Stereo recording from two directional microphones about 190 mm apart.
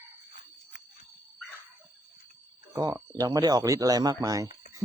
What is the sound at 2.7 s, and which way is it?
Speech, 20° right (ahead or behind).